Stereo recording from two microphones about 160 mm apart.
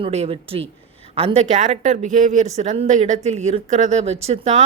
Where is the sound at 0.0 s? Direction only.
40° right (ahead or behind).